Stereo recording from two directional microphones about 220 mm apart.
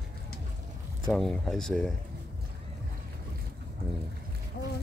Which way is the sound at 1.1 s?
Centre (ahead or behind).